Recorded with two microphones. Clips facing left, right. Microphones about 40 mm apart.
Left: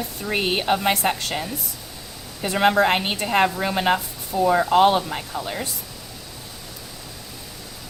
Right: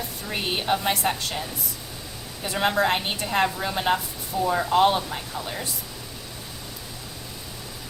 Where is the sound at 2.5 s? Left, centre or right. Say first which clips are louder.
Left 4 dB; left.